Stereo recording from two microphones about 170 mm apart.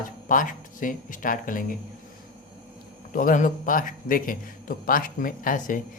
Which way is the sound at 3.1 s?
50° left (ahead or behind).